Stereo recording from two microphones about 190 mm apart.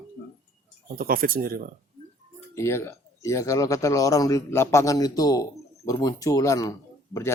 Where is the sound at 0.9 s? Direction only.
50° right (ahead or behind).